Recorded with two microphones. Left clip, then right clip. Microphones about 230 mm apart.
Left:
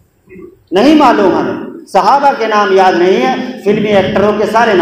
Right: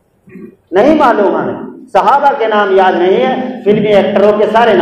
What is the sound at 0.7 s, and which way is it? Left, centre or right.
A man's voice, left.